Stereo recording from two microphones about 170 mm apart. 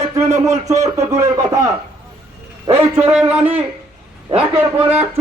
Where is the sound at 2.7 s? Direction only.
25° right (ahead or behind).